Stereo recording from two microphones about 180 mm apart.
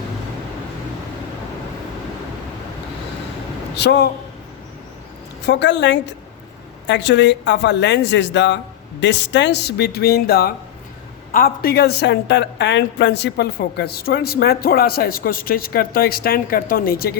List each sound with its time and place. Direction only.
3.8 s speech: 65° left (ahead or behind)
5.4 s a woman's voice: 70° left (ahead or behind)